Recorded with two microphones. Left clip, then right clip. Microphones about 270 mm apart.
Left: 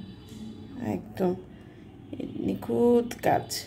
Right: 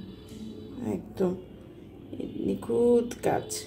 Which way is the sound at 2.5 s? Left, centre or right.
Left.